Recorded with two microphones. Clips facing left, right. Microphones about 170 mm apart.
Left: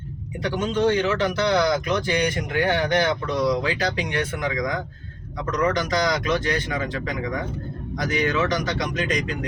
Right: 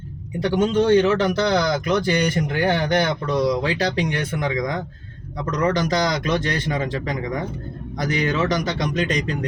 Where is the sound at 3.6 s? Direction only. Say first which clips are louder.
Right 3 dB; 35° right (ahead or behind).